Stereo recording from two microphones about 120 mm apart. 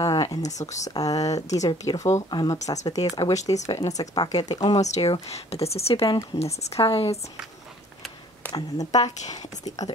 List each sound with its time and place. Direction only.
0.0 s a sound: 30° left (ahead or behind)
0.4 s speech: 75° left (ahead or behind)
0.9 s speech: 30° left (ahead or behind)
4.7 s speech: 70° left (ahead or behind); by 7.2 s 50° left (ahead or behind)
8.5 s speech: 30° left (ahead or behind)
9.8 s speech: 75° left (ahead or behind)